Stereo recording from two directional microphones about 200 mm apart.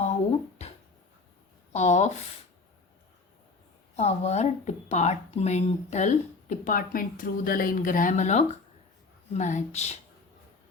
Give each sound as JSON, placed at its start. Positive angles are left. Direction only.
{"t": 1.7, "sound": "speech", "side_deg": 35}
{"t": 3.9, "sound": "speech", "side_deg": 35}